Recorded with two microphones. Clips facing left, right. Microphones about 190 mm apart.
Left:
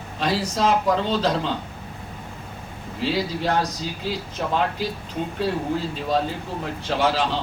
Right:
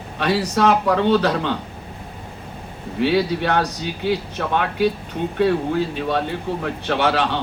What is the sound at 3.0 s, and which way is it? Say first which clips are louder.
A man's voice: right 5 dB; 65° right (ahead or behind).